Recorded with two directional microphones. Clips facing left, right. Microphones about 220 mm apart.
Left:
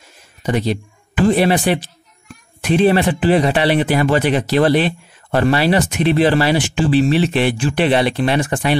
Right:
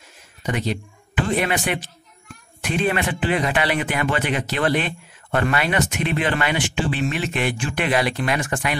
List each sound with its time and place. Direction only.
0.5 s speech: 35° left (ahead or behind)